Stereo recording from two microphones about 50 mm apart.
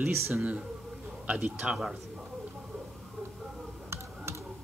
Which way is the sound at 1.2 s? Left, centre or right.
Right.